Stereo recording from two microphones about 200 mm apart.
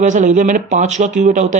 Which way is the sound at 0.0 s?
40° right (ahead or behind).